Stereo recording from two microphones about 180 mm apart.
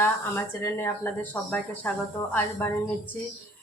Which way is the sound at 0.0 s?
15° left (ahead or behind).